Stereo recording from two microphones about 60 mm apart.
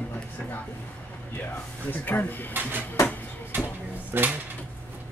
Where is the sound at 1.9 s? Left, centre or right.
Left.